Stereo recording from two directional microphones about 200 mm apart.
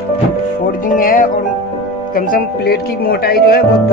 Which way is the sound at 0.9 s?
45° left (ahead or behind).